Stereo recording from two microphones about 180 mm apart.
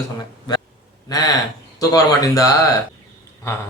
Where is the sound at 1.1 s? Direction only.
20° left (ahead or behind).